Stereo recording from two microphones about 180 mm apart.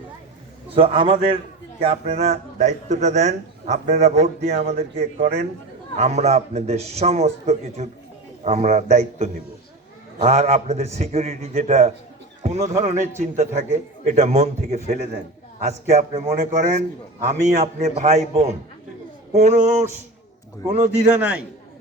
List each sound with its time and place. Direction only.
0.8 s a man's voice: 30° right (ahead or behind)
21.1 s a man's voice: 5° right (ahead or behind)